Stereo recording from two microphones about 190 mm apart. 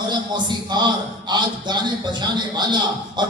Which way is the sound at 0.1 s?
25° right (ahead or behind).